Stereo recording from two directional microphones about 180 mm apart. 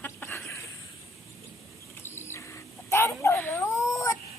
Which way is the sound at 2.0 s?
15° left (ahead or behind).